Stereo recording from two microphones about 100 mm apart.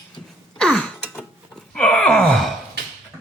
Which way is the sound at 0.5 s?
10° left (ahead or behind).